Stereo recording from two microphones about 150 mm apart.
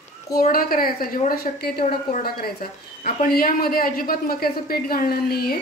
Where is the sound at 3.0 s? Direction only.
80° left.